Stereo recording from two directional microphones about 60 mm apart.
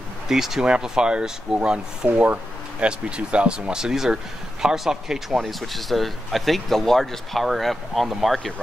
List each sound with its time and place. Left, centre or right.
0.3 s speech: centre
2.0 s speech: right; by 8.5 s centre